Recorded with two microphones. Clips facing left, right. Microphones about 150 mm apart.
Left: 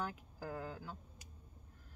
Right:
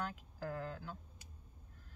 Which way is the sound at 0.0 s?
10° left (ahead or behind).